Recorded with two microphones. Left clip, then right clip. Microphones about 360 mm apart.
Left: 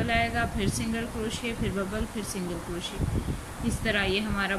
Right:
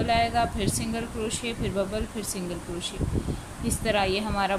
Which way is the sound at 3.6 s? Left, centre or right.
Centre.